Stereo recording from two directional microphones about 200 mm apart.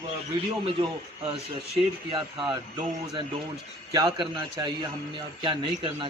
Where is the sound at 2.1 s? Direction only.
25° right (ahead or behind).